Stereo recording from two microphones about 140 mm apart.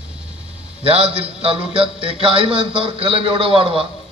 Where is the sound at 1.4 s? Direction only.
40° right (ahead or behind).